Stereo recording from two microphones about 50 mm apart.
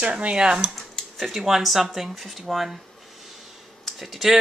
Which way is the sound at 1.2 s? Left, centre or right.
Centre.